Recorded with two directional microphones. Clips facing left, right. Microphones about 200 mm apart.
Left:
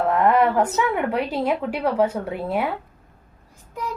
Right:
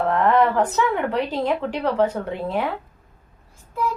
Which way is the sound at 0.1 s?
10° left (ahead or behind).